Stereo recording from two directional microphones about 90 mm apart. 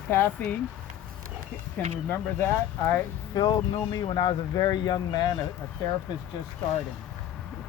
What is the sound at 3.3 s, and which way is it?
Speech, 50° left (ahead or behind).